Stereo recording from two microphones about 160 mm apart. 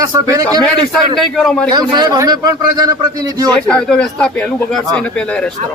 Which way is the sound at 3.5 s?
5° left (ahead or behind).